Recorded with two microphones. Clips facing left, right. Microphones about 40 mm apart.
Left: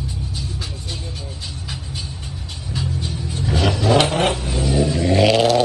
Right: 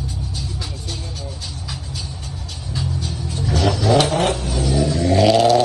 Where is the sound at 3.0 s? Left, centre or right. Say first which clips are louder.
Even; left.